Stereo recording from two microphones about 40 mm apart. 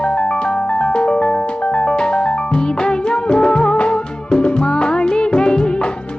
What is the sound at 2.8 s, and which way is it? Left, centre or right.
Music of bollywood, left.